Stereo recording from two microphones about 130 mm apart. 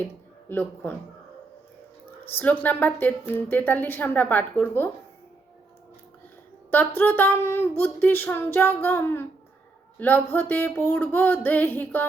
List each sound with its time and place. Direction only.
0.0 s speech: 15° left (ahead or behind)
2.3 s speech: 15° left (ahead or behind)
6.7 s speech: 15° left (ahead or behind)